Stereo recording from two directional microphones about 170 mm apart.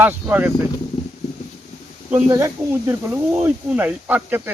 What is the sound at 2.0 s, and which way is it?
Speech, 15° right (ahead or behind).